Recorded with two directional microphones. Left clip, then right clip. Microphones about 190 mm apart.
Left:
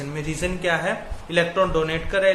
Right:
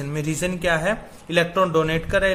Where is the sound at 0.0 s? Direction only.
50° right (ahead or behind).